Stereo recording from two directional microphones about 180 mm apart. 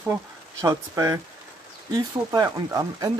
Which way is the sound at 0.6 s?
20° right (ahead or behind).